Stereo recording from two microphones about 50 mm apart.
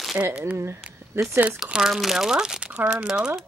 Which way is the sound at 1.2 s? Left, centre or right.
Right.